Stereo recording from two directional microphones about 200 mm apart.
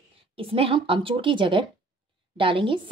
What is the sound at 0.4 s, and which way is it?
A woman's voice, 30° right (ahead or behind).